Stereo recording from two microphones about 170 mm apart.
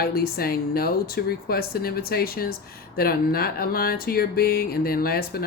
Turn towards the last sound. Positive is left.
turn(degrees=60)  # may be behind; listen again after turning